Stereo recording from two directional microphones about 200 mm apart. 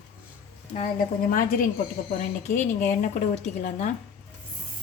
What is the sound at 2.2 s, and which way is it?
Speech, 40° left (ahead or behind).